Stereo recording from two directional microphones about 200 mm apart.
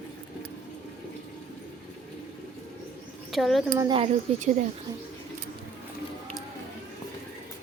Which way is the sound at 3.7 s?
25° right (ahead or behind).